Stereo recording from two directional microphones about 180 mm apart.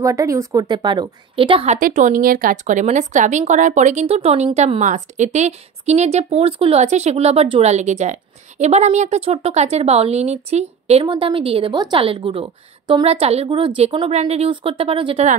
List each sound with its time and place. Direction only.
0.0 s a woman's voice: 15° right (ahead or behind)
1.8 s a woman's voice: 45° right (ahead or behind); by 15.2 s 30° right (ahead or behind)